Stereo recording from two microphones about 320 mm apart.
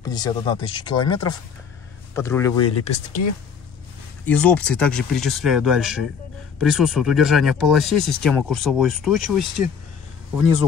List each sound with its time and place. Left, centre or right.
0.0 s speech: centre
4.3 s speech: centre